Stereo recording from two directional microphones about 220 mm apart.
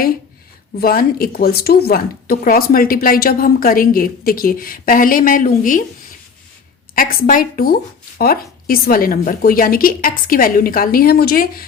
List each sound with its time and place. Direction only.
0.8 s speech: 40° left (ahead or behind)
6.9 s speech: 40° left (ahead or behind)